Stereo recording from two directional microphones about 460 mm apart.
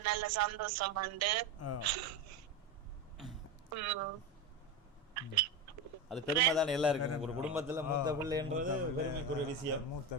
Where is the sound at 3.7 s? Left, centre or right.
Right.